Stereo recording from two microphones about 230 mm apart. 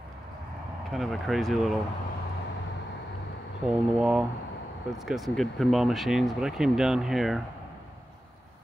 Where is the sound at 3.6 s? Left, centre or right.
Centre.